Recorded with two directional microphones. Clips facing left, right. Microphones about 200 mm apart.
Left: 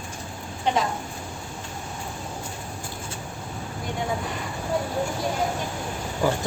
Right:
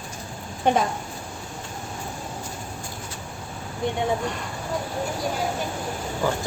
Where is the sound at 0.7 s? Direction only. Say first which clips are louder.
Right 3 dB; 50° right (ahead or behind).